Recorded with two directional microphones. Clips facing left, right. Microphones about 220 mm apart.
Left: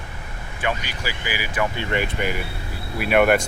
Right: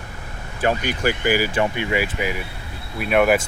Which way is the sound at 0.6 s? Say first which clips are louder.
Right 6 dB; 45° right (ahead or behind).